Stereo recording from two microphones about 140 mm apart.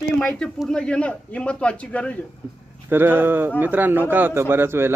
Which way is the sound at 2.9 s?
15° right (ahead or behind).